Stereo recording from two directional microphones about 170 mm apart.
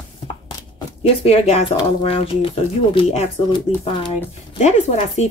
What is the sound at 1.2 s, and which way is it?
Speech, 35° left (ahead or behind).